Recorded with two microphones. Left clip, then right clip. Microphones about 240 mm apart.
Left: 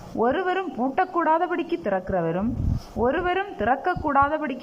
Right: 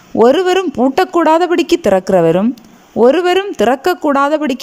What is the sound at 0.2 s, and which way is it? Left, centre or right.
A woman's voice, right.